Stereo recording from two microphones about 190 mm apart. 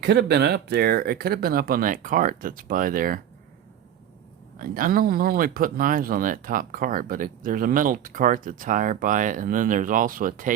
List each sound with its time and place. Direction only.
0.0 s speech: 60° right (ahead or behind)
4.6 s speech: 50° right (ahead or behind)